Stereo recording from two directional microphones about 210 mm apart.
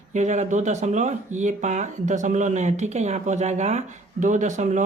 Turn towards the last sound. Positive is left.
turn(degrees=-35)  # may be behind; listen again after turning